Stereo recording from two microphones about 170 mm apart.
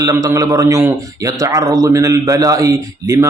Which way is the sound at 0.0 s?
20° right (ahead or behind).